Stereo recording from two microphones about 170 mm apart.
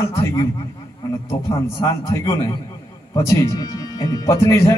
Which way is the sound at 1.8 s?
15° left (ahead or behind).